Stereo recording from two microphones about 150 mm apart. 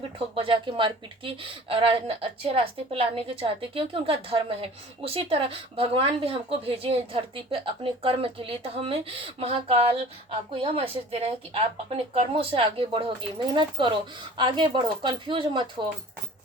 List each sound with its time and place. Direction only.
0.3 s speech: 35° right (ahead or behind)